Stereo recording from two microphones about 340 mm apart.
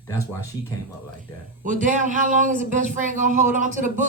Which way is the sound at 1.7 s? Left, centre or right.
Right.